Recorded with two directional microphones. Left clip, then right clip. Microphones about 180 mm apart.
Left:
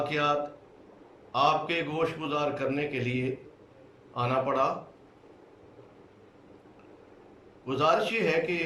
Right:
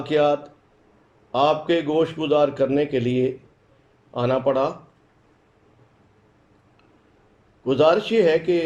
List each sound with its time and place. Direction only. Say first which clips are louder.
0.0 s a man's voice: right 7 dB; 50° right (ahead or behind)
7.6 s a man's voice: right 8 dB; 50° right (ahead or behind)